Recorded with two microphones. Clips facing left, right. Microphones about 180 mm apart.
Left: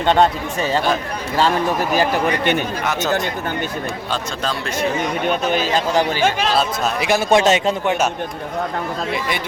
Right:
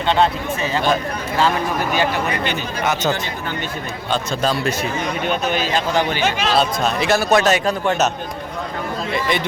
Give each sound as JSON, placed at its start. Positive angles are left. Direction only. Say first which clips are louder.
{"t": 0.0, "sound": "speech", "louder": "left 2 dB", "side_deg": 45}
{"t": 5.5, "sound": "speech", "louder": "left 1 dB", "side_deg": 40}
{"t": 6.6, "sound": "speech", "louder": "right 1 dB", "side_deg": 10}
{"t": 7.2, "sound": "a man's voice", "louder": "left 3 dB", "side_deg": 25}